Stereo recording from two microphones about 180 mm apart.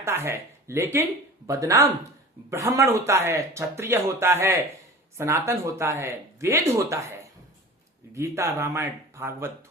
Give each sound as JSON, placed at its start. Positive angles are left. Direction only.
{"t": 0.0, "sound": "speech", "side_deg": -15}